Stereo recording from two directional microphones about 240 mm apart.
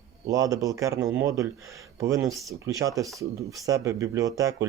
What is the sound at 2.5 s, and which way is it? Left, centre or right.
Speech, centre.